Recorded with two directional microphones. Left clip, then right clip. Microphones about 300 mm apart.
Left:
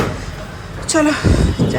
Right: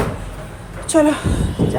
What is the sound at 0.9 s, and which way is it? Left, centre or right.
Speech, centre.